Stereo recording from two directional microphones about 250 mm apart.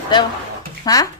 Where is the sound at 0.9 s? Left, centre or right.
Centre.